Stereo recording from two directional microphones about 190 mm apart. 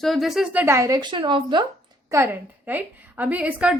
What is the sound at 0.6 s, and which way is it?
A woman's voice, 15° right (ahead or behind).